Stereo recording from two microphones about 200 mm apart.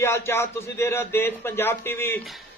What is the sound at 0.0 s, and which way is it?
Speech, 10° left (ahead or behind).